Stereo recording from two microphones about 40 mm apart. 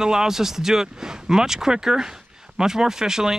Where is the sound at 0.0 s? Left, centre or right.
Centre.